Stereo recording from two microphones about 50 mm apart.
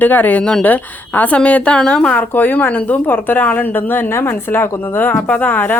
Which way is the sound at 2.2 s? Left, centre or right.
Left.